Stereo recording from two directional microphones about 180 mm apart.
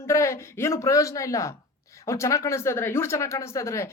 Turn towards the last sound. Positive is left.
turn(degrees=15)  # may be behind; listen again after turning